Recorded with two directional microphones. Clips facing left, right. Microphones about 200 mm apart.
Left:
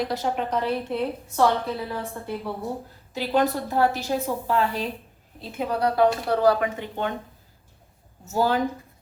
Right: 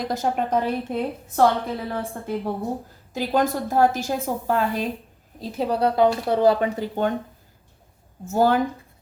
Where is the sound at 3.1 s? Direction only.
45° right (ahead or behind); by 6.5 s 20° right (ahead or behind).